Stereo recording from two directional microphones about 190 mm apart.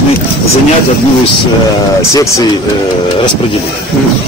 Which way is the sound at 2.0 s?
15° left (ahead or behind).